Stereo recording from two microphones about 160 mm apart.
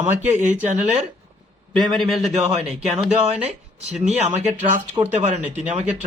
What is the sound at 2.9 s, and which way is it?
Speech, 40° right (ahead or behind).